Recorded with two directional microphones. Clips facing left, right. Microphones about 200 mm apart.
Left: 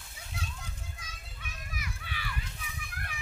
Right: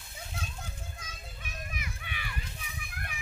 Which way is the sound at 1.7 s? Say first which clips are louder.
Even; 20° right (ahead or behind).